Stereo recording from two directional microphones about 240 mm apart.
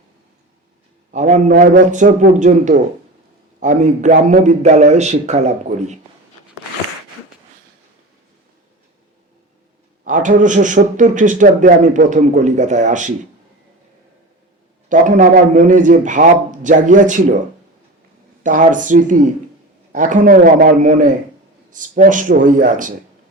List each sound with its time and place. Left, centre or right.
1.1 s a man's voice: right
10.0 s a man's voice: right
14.8 s a man's voice: right
18.4 s a man's voice: right